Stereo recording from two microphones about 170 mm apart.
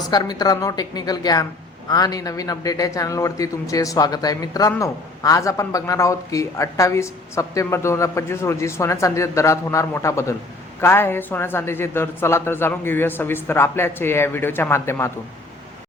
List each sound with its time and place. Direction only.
0.1 s a man's voice: 25° left (ahead or behind)